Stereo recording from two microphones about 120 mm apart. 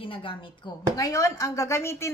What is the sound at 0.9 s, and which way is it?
A woman's voice, 25° left (ahead or behind).